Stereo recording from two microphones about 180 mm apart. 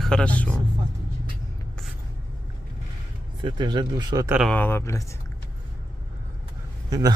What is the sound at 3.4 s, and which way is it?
Speech, 25° right (ahead or behind).